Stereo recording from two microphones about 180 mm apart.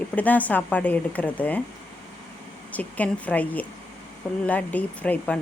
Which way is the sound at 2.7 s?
10° left (ahead or behind).